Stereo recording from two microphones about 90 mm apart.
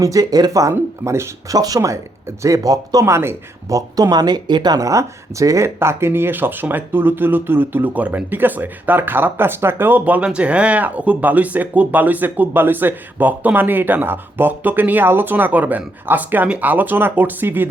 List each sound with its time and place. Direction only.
0.0 s speech: 40° right (ahead or behind)
0.7 s speech: 30° right (ahead or behind)
1.5 s speech: 45° right (ahead or behind)
3.7 s speech: 40° right (ahead or behind); by 17.7 s 20° right (ahead or behind)